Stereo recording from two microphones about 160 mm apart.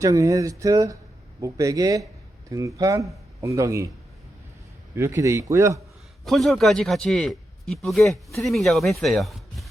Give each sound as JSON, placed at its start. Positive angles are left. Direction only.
{"t": 0.0, "sound": "speech", "side_deg": -20}
{"t": 4.9, "sound": "speech", "side_deg": -20}
{"t": 6.2, "sound": "a man's voice", "side_deg": 0}